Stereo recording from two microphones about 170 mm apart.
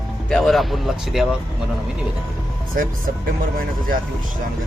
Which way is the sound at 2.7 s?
55° right (ahead or behind).